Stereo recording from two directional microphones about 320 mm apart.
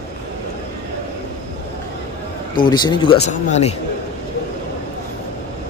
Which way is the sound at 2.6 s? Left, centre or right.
Centre.